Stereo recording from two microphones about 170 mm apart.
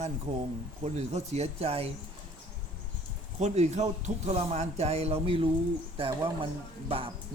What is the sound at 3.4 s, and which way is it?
A man's voice, 40° right (ahead or behind).